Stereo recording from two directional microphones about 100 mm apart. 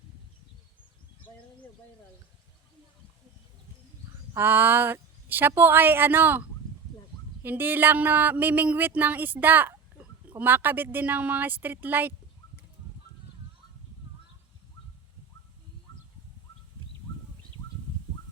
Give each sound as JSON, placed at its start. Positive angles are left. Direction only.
{"t": 4.4, "sound": "speech", "side_deg": -20}
{"t": 7.4, "sound": "speech", "side_deg": -20}